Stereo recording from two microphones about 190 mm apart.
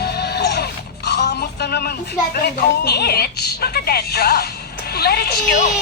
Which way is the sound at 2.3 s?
55° left (ahead or behind).